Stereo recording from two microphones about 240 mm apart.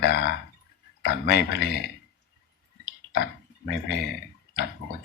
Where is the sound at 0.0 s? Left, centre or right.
Left.